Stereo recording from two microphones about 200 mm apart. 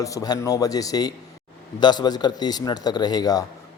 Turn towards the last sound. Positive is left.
turn(degrees=20)  # may be behind; listen again after turning